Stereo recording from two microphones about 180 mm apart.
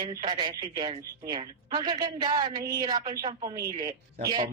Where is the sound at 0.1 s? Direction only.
25° right (ahead or behind).